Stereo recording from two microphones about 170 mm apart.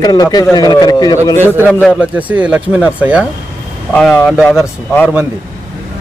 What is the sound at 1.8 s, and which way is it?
Speech, 5° left (ahead or behind).